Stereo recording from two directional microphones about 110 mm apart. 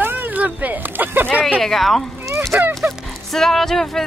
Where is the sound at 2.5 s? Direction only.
20° right (ahead or behind).